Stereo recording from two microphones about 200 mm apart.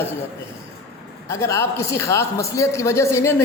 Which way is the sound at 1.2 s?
15° left (ahead or behind).